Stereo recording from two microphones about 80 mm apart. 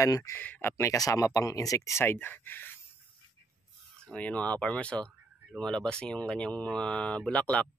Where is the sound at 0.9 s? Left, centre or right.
Left.